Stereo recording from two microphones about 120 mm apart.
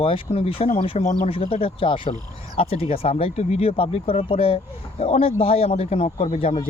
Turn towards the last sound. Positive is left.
turn(degrees=65)  # may be behind; listen again after turning